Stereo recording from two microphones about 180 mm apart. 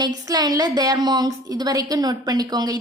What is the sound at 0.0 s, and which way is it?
A woman's voice, 20° right (ahead or behind).